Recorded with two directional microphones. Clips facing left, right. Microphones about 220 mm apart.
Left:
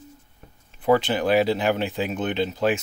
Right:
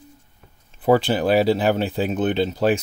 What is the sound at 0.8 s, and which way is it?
Speech, 35° right (ahead or behind).